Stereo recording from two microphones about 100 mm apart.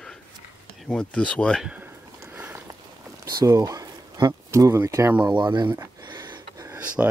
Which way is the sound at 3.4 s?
35° right (ahead or behind).